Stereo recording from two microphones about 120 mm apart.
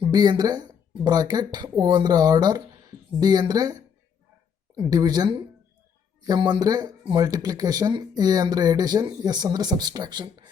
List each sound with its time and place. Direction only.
0.0 s speech: 35° right (ahead or behind)